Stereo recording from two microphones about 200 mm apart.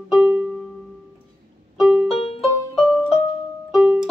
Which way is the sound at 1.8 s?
5° right (ahead or behind).